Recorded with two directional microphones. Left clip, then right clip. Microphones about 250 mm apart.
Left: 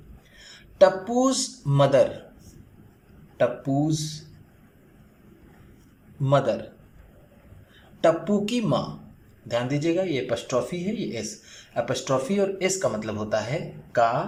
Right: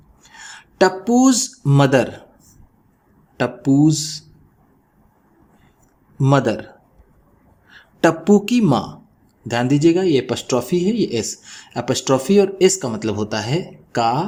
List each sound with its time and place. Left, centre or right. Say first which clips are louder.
0.3 s speech: right 1 dB; right
3.3 s speech: right 5 dB; right
6.2 s speech: right 5 dB; right
8.0 s speech: right 6 dB; right